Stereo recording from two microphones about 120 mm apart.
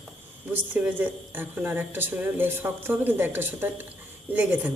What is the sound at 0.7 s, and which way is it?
Speech, 15° right (ahead or behind).